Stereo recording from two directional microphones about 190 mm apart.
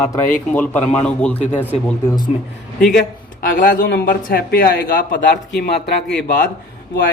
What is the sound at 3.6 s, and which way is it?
Speech, 50° left (ahead or behind).